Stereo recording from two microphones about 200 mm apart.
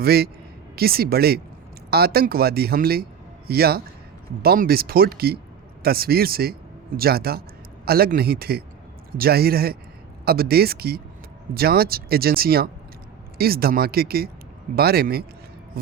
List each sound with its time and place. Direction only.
0.0 s a man's voice: 50° right (ahead or behind)